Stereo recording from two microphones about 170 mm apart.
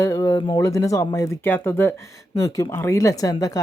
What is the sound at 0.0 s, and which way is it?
Speech, 20° left (ahead or behind).